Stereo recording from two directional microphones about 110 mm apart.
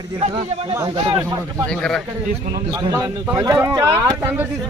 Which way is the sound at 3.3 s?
35° right (ahead or behind).